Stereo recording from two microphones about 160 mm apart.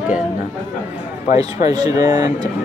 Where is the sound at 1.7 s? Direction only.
25° right (ahead or behind).